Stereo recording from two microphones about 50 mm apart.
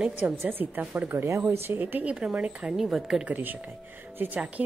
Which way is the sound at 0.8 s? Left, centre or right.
Right.